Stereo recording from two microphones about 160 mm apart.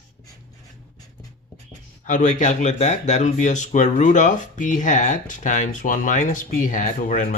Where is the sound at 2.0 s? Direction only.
50° left (ahead or behind).